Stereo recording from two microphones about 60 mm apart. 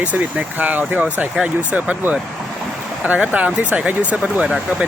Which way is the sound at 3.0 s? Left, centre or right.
Right.